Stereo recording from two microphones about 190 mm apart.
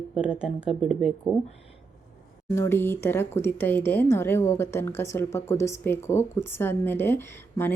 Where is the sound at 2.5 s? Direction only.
15° left (ahead or behind).